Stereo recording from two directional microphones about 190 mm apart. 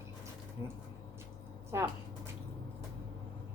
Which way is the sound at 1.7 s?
15° right (ahead or behind).